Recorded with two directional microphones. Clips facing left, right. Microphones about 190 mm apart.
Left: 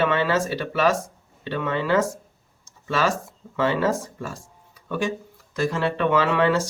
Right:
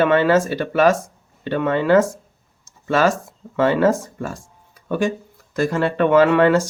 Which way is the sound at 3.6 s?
50° right (ahead or behind).